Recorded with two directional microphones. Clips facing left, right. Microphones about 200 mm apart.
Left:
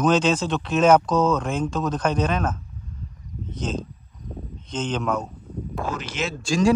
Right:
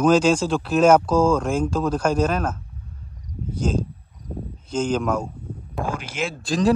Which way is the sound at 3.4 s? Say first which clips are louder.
Right 5 dB; 10° right (ahead or behind).